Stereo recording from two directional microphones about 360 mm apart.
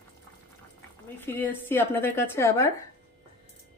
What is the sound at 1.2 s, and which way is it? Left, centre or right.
A woman's voice, centre.